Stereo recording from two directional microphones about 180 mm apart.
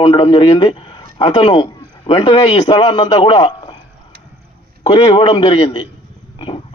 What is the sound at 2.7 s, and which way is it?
Speech, 25° left (ahead or behind).